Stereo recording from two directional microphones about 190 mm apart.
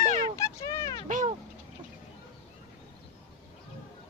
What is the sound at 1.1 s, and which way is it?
Cat, 40° right (ahead or behind).